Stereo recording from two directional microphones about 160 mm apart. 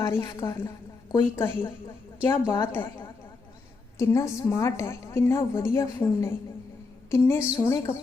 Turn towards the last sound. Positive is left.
turn(degrees=20)  # may be behind; listen again after turning